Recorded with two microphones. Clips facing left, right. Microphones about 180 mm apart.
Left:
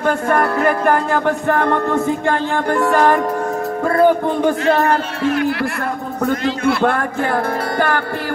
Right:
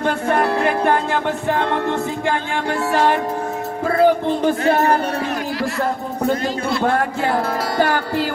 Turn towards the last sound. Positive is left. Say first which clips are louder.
# left 3 dB
turn(degrees=55)  # may be behind; listen again after turning